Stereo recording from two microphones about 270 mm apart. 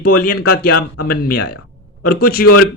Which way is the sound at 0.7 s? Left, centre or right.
Left.